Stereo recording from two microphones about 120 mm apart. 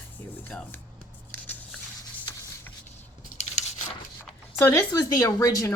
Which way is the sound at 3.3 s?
70° left (ahead or behind).